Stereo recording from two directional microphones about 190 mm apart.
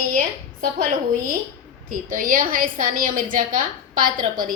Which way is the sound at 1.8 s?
45° right (ahead or behind).